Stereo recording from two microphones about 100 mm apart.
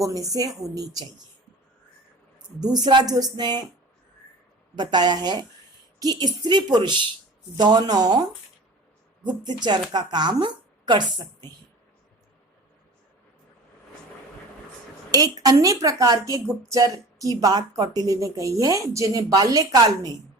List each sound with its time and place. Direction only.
0.0 s a woman's voice: 35° right (ahead or behind)
2.6 s a woman's voice: 40° right (ahead or behind)
4.8 s a woman's voice: 45° right (ahead or behind)
9.2 s a woman's voice: 45° right (ahead or behind)
15.1 s a woman's voice: 40° right (ahead or behind)